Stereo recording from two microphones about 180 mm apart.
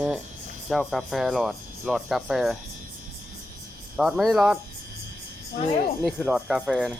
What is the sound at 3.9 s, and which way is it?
Speech, centre (ahead or behind).